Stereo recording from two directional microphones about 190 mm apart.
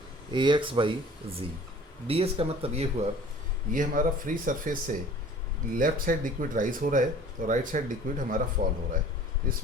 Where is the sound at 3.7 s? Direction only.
45° right (ahead or behind).